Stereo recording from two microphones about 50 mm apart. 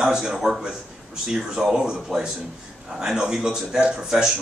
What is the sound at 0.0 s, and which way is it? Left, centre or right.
Speech, centre.